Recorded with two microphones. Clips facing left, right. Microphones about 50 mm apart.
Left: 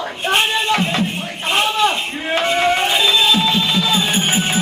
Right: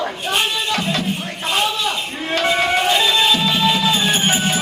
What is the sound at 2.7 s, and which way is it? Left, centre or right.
Speech, centre.